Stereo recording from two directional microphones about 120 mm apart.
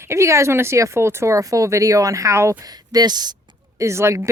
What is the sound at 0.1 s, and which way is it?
Speech, 25° right (ahead or behind).